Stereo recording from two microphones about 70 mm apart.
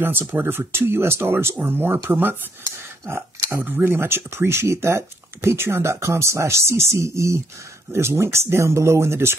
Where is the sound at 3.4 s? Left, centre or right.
Right.